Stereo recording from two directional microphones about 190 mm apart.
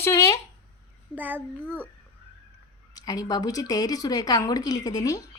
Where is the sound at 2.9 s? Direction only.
20° left (ahead or behind).